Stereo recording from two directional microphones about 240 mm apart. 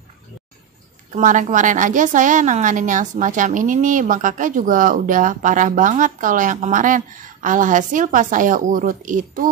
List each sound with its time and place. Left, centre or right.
1.1 s a woman's voice: right